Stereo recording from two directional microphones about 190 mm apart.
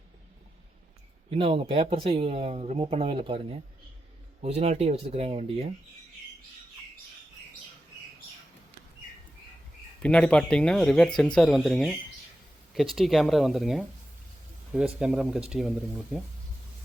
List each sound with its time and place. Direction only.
1.4 s speech: 30° right (ahead or behind)
10.0 s speech: 5° left (ahead or behind)
13.0 s speech: centre (ahead or behind)